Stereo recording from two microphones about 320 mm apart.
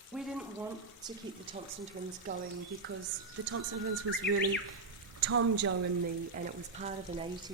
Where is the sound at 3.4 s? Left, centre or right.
Right.